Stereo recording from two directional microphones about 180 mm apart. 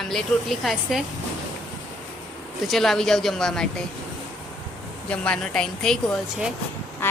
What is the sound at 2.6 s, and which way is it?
Speech, centre (ahead or behind).